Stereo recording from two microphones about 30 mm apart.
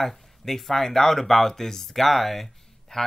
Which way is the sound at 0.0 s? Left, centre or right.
Centre.